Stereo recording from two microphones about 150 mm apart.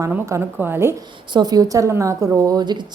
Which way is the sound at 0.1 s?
15° right (ahead or behind).